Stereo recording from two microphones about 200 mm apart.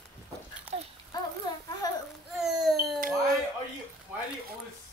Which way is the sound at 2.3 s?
Centre (ahead or behind).